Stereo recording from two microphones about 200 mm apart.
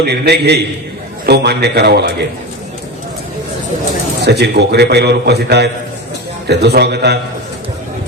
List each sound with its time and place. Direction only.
0.0 s a man's voice: 55° right (ahead or behind)
4.2 s a man's voice: 55° right (ahead or behind)